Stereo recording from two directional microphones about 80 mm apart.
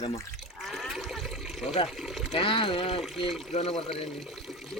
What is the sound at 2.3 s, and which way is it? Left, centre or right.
Speech, left.